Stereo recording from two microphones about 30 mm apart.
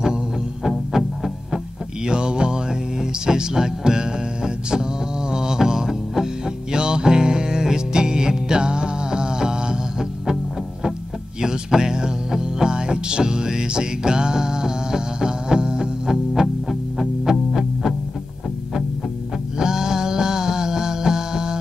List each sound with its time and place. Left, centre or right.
0.7 s music: centre
2.0 s music: right
11.4 s music: centre
16.6 s music: centre
19.6 s music: right